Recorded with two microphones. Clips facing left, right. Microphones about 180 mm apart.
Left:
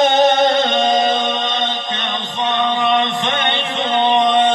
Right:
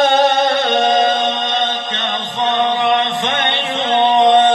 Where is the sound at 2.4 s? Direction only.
20° right (ahead or behind).